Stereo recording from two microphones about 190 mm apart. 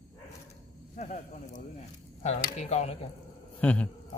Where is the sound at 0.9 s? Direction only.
40° left (ahead or behind).